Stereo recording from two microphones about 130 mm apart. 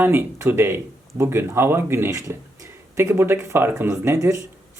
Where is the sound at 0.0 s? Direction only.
20° right (ahead or behind).